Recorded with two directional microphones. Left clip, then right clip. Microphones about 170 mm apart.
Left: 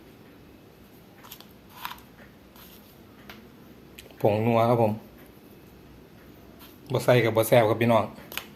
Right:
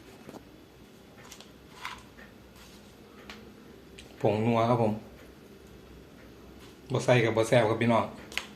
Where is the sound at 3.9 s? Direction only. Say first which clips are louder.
Left 4 dB; 60° left (ahead or behind).